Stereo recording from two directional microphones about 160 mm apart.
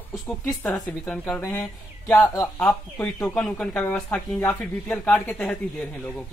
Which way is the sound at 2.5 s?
5° left (ahead or behind).